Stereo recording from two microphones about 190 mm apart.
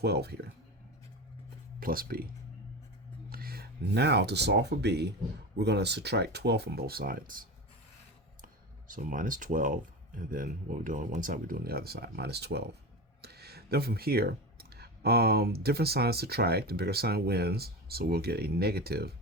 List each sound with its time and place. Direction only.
0.0 s speech: 60° right (ahead or behind)
1.8 s speech: 50° right (ahead or behind)
3.2 s speech: 50° right (ahead or behind)
8.9 s speech: 45° right (ahead or behind)